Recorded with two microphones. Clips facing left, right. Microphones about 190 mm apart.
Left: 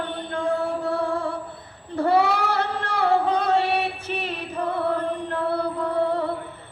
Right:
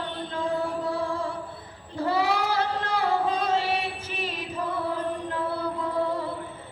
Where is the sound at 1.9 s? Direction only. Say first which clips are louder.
Left 5 dB; 65° left (ahead or behind).